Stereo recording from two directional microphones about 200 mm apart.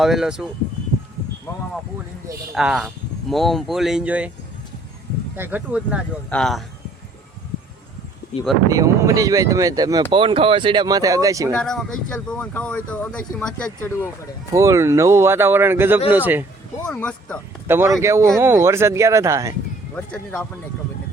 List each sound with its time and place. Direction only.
0.0 s speech: centre (ahead or behind)
2.5 s speech: 5° right (ahead or behind)
5.4 s speech: 10° right (ahead or behind)
8.6 s speech: 15° right (ahead or behind)
11.5 s speech: 5° left (ahead or behind)
14.5 s speech: 15° right (ahead or behind)
16.8 s speech: 10° left (ahead or behind)
17.7 s speech: 10° right (ahead or behind)
20.0 s speech: 10° left (ahead or behind)